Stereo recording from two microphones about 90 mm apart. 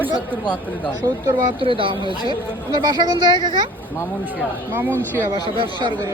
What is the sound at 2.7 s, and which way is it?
Speech, 50° right (ahead or behind).